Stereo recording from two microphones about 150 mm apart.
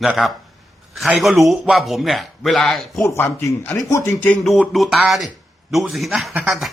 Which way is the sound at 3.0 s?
20° left (ahead or behind).